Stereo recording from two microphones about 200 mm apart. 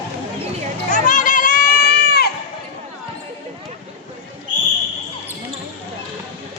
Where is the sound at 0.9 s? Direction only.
40° left (ahead or behind).